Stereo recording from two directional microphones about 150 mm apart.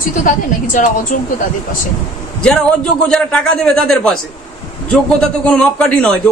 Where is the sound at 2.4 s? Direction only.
5° left (ahead or behind).